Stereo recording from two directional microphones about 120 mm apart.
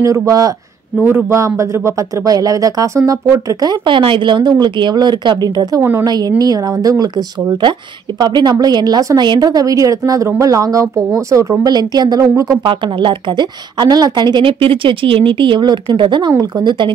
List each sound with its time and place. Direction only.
0.0 s speech: 25° right (ahead or behind)
5.8 s speech: 20° right (ahead or behind)
6.0 s speech: 35° right (ahead or behind)
12.6 s speech: 40° right (ahead or behind)